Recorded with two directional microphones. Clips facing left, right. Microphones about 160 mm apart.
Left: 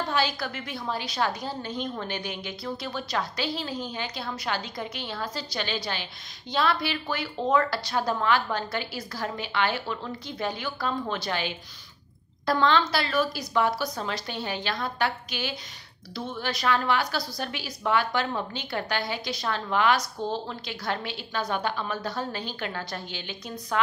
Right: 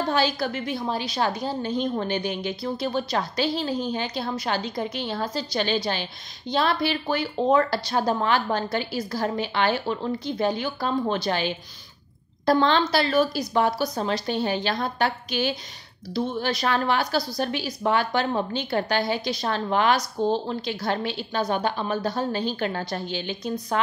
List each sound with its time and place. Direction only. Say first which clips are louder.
0.1 s speech: right 4 dB; 30° right (ahead or behind)